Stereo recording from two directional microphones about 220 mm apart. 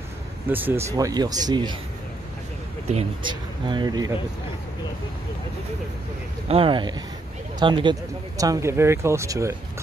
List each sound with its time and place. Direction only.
0.5 s speech: 10° right (ahead or behind)
2.9 s speech: 25° right (ahead or behind)
6.5 s speech: 25° right (ahead or behind)